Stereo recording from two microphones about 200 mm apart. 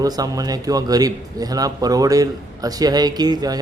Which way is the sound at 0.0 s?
20° right (ahead or behind).